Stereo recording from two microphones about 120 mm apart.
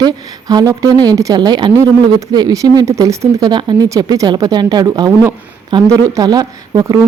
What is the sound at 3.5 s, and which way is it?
Speech, 40° right (ahead or behind).